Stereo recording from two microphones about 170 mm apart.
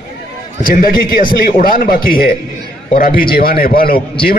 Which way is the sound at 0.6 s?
55° left (ahead or behind).